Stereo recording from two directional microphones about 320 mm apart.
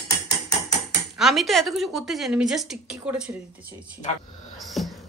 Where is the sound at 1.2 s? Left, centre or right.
Centre.